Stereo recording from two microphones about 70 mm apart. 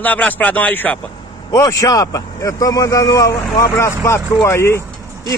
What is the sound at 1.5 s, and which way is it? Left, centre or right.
A man's voice, left.